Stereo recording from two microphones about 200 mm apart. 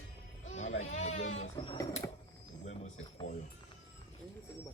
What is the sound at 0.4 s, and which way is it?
Music, 35° left (ahead or behind).